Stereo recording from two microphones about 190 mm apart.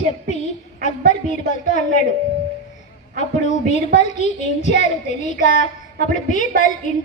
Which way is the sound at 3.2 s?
40° left (ahead or behind).